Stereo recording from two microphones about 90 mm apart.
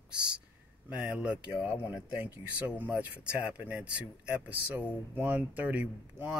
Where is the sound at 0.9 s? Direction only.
15° right (ahead or behind).